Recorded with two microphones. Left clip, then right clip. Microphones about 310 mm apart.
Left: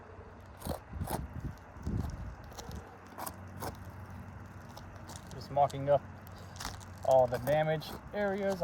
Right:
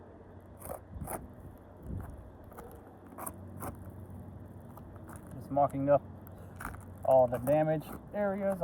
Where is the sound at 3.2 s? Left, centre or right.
Centre.